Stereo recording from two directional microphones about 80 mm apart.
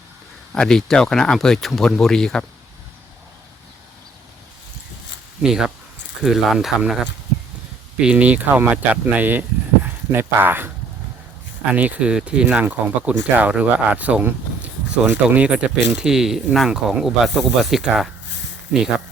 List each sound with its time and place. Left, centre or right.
0.5 s speech: centre
5.4 s speech: centre
7.9 s speech: centre
11.7 s speech: centre